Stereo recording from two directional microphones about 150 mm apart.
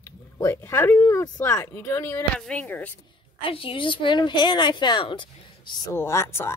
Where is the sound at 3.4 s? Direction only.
35° left (ahead or behind).